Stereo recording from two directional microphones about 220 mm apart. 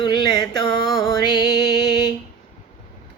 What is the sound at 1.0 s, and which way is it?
Music, 15° left (ahead or behind).